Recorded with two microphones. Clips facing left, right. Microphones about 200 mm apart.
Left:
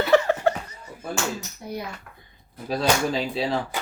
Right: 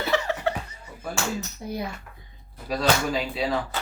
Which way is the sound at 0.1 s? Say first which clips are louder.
Left 6 dB; 50° left (ahead or behind).